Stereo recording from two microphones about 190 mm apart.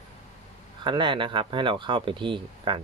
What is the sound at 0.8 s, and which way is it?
Speech, 25° right (ahead or behind).